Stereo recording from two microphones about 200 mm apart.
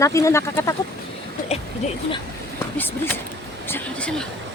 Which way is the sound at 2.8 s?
10° left (ahead or behind).